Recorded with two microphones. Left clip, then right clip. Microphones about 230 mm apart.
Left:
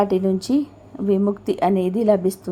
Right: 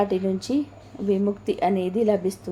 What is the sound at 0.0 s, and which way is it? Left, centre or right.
Speech, centre.